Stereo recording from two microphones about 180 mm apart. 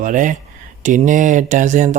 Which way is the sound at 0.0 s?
45° right (ahead or behind).